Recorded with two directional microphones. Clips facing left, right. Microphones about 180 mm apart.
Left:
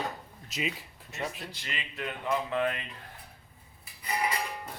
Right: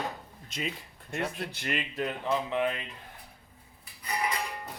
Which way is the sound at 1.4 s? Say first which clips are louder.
Right 7 dB; 55° right (ahead or behind).